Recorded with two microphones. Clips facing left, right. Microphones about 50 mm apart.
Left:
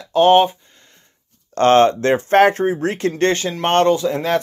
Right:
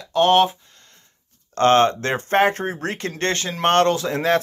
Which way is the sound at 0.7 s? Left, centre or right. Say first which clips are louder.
Left 1 dB; centre.